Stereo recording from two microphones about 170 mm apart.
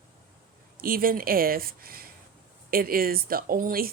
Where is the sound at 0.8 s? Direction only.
60° right (ahead or behind).